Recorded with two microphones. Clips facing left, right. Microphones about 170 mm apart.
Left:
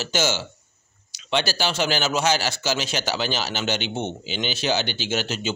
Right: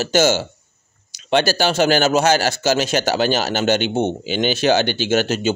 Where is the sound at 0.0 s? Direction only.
45° right (ahead or behind).